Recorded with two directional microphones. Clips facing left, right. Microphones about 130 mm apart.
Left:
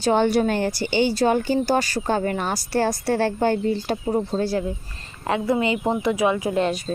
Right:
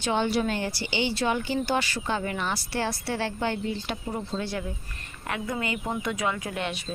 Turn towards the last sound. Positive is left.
turn(degrees=40)  # may be behind; listen again after turning